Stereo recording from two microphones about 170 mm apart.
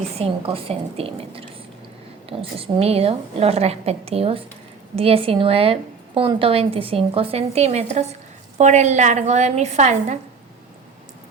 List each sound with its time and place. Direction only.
0.2 s a woman's voice: 35° right (ahead or behind)